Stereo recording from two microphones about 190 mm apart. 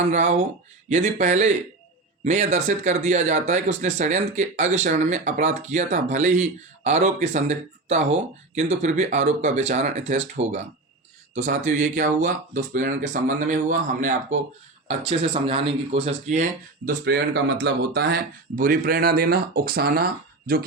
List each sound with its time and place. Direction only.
0.0 s speech: 35° right (ahead or behind)
16.8 s speech: 60° right (ahead or behind)